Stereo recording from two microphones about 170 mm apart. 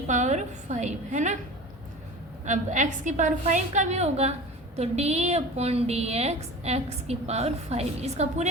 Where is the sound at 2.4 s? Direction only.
45° right (ahead or behind).